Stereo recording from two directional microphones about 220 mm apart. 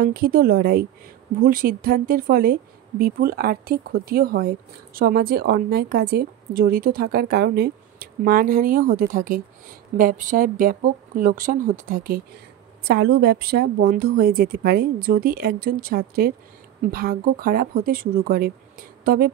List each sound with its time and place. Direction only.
0.0 s speech: 45° right (ahead or behind)